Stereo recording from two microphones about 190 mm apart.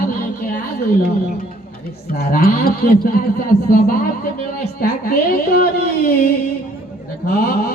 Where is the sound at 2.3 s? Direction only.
50° left (ahead or behind).